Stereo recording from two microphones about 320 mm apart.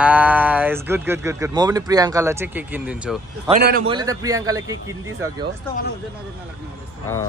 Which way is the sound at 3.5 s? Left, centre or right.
Right.